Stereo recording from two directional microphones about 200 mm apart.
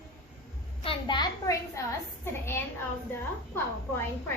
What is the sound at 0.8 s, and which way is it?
A woman's voice, 25° left (ahead or behind).